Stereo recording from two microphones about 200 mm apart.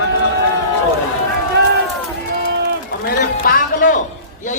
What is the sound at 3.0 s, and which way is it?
Speech, 45° left (ahead or behind).